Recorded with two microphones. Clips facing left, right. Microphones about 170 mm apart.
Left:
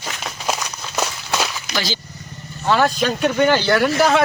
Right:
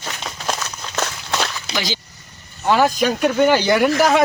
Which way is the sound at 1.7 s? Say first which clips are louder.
Even; 15° right (ahead or behind).